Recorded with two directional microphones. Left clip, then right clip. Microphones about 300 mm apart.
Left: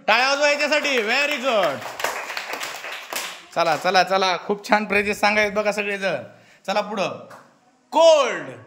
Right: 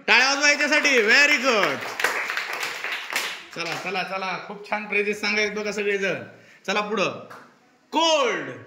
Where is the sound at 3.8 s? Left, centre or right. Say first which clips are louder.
Left 10 dB; left.